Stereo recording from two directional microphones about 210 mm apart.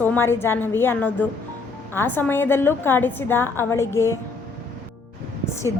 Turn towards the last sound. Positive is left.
turn(degrees=15)  # may be behind; listen again after turning